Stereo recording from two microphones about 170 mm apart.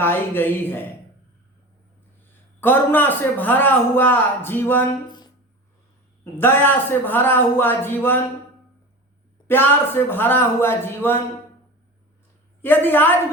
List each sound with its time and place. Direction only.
0.0 s a man's voice: 15° left (ahead or behind)
2.6 s a man's voice: 10° left (ahead or behind)
5.0 s a sound: 25° left (ahead or behind)
6.4 s a man's voice: 10° left (ahead or behind)
9.5 s a man's voice: 10° left (ahead or behind)
12.6 s a man's voice: 10° left (ahead or behind)